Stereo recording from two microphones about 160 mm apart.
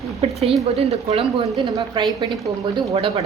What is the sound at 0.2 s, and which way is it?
A woman's voice, 40° right (ahead or behind).